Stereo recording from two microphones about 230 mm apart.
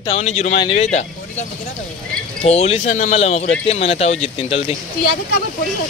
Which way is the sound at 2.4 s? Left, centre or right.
Left.